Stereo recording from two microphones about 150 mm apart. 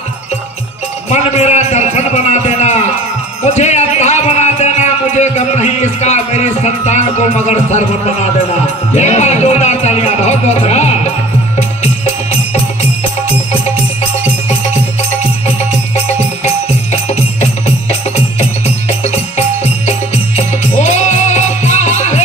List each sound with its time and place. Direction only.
1.1 s a sound: 45° left (ahead or behind)
3.4 s music: 50° left (ahead or behind)
8.9 s speech: 50° left (ahead or behind)
16.1 s music: 45° left (ahead or behind)